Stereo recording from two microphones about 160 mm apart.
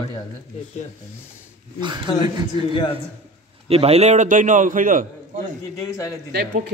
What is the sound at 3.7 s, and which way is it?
A man's voice, 40° right (ahead or behind).